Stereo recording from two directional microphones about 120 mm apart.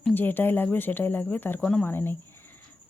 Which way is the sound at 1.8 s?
20° left (ahead or behind).